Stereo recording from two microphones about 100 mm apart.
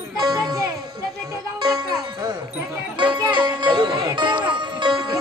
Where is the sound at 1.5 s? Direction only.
45° right (ahead or behind).